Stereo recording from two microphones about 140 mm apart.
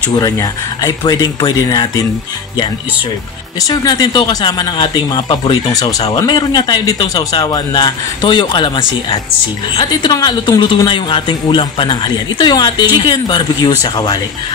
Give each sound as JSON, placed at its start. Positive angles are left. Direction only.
{"t": 0.1, "sound": "speech", "side_deg": 25}
{"t": 3.6, "sound": "speech", "side_deg": 25}